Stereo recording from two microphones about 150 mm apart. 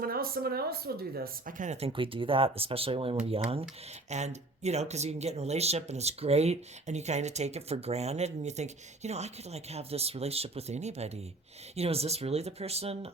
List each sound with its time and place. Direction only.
0.0 s speech: 85° right; by 1.9 s 50° right (ahead or behind)
1.9 s speech: 35° right (ahead or behind)